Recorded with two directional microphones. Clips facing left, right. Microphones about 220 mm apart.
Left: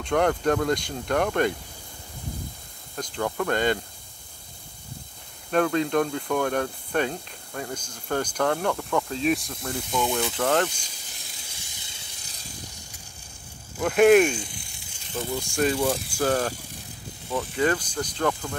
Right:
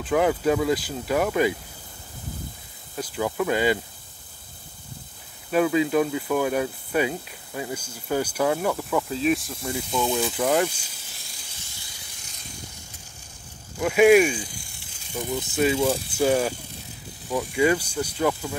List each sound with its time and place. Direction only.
0.0 s speech: 5° right (ahead or behind)
3.0 s speech: 5° right (ahead or behind)
5.5 s speech: 5° right (ahead or behind)
10.3 s speech: 10° right (ahead or behind)
11.7 s hiss: 20° left (ahead or behind)
13.7 s speech: 5° right (ahead or behind)
15.1 s speech: 15° right (ahead or behind)